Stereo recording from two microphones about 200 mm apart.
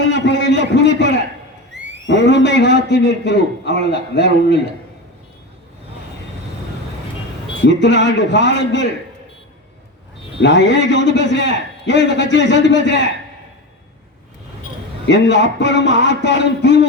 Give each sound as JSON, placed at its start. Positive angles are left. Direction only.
{"t": 0.0, "sound": "a sound", "side_deg": 60}
{"t": 1.7, "sound": "a sound", "side_deg": -65}
{"t": 2.0, "sound": "a man's voice", "side_deg": 60}
{"t": 7.6, "sound": "a man's voice", "side_deg": 60}
{"t": 10.3, "sound": "a man's voice", "side_deg": 60}
{"t": 15.0, "sound": "a man's voice", "side_deg": 60}